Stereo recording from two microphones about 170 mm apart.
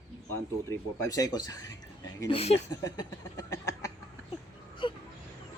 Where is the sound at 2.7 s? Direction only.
20° left (ahead or behind).